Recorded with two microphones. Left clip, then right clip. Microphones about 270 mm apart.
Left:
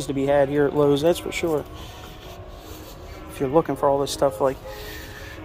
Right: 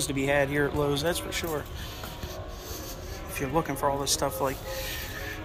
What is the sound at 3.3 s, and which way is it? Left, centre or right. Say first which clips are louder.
Speech: left 8 dB; left.